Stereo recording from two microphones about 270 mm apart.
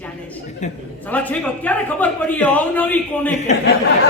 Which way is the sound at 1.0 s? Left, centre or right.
Centre.